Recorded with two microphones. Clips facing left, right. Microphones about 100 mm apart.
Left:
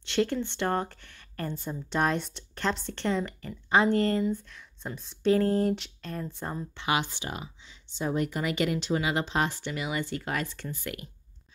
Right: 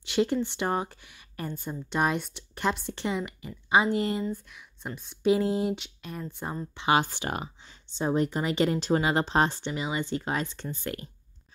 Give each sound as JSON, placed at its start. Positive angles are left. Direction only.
{"t": 0.0, "sound": "speech", "side_deg": -15}
{"t": 7.1, "sound": "speech", "side_deg": -55}
{"t": 8.0, "sound": "speech", "side_deg": -30}